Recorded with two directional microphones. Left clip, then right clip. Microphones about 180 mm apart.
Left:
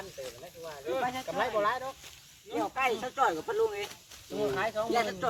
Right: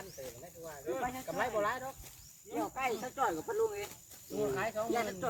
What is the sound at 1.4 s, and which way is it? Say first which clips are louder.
Speech: left 4 dB; 40° left (ahead or behind).